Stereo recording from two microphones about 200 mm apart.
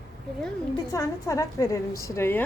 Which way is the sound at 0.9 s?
15° left (ahead or behind).